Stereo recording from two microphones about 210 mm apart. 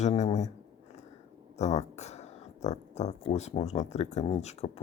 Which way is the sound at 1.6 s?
30° left (ahead or behind).